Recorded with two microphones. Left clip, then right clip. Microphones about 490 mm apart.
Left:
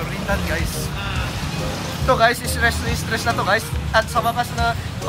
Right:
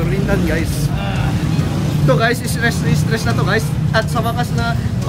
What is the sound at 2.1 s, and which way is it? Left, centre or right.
Speech, centre.